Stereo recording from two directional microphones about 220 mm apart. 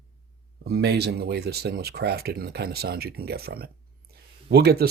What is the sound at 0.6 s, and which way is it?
Speech, 45° right (ahead or behind).